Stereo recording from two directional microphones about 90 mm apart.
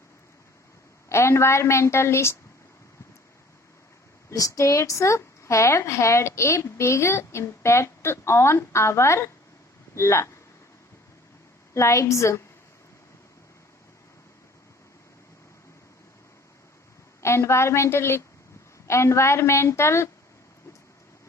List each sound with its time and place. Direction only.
1.1 s speech: 30° left (ahead or behind)
4.3 s speech: 40° left (ahead or behind)
11.7 s speech: 35° left (ahead or behind)
17.2 s speech: 30° left (ahead or behind)